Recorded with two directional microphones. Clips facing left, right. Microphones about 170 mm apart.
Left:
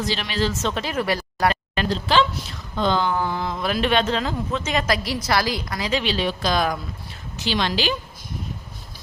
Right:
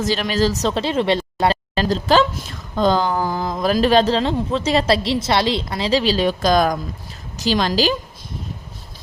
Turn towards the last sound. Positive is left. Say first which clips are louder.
# right 5 dB
turn(degrees=-40)  # may be behind; listen again after turning